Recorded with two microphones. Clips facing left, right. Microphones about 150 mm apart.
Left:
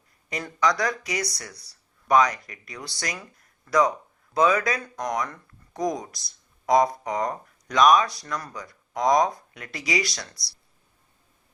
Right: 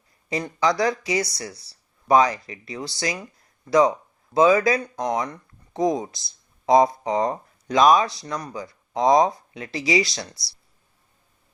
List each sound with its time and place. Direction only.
0.3 s speech: 25° right (ahead or behind)